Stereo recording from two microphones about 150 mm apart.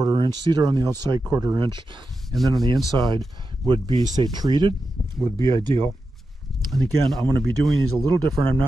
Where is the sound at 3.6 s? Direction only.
30° right (ahead or behind).